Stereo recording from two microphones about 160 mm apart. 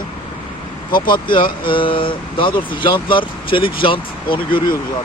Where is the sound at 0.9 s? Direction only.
60° left (ahead or behind).